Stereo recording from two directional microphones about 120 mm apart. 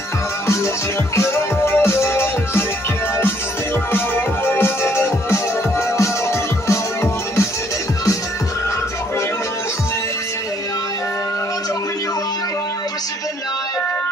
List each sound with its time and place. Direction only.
1.1 s music: 20° left (ahead or behind)
3.9 s music: 20° left (ahead or behind)